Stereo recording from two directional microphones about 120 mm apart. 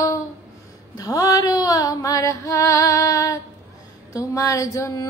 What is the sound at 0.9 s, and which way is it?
Female singing, 30° left (ahead or behind).